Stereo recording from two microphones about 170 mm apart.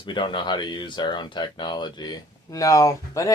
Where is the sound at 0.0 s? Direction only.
25° left (ahead or behind).